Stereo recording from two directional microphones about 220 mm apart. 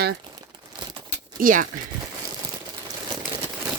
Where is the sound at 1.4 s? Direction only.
40° right (ahead or behind).